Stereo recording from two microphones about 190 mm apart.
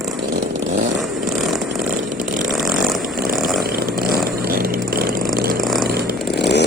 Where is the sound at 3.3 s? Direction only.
Centre (ahead or behind).